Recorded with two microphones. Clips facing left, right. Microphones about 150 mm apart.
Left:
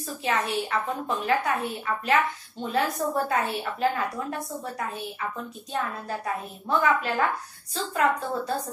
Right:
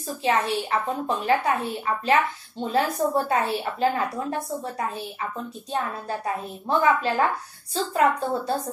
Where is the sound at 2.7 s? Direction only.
30° right (ahead or behind).